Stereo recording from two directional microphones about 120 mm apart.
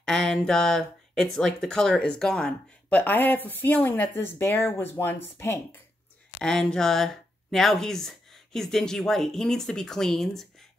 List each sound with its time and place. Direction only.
0.0 s speech: 5° left (ahead or behind); by 5.8 s 20° left (ahead or behind)
6.4 s speech: 5° left (ahead or behind)